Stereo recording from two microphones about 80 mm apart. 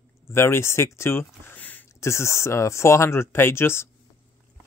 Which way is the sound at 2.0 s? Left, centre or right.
Left.